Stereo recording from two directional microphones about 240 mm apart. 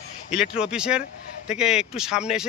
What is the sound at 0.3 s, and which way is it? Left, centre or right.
Speech, centre.